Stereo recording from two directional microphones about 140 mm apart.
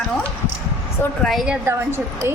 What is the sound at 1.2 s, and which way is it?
Speech, centre (ahead or behind).